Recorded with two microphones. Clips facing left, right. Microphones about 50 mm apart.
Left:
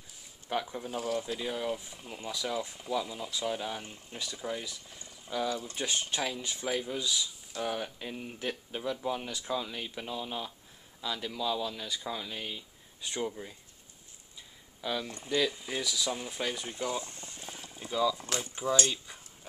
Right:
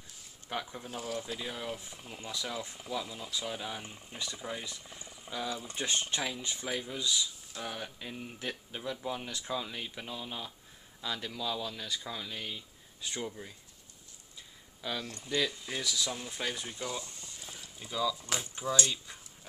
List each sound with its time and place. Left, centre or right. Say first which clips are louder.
0.5 s speech: left 5 dB; centre
4.6 s a sound: even; centre
5.3 s speech: left 4 dB; centre
14.8 s speech: left 3 dB; centre
15.0 s speech: left 2 dB; left
15.3 s speech: left 3 dB; centre
16.6 s speech: left 4 dB; left
17.1 s boiling: left 3 dB; left
17.7 s speech: left 4 dB; centre
18.6 s speech: left 4 dB; left